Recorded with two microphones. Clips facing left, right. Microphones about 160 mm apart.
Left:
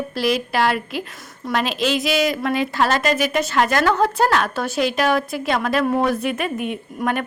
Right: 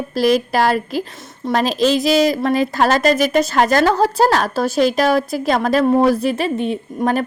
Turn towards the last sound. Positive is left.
turn(degrees=-30)  # may be behind; listen again after turning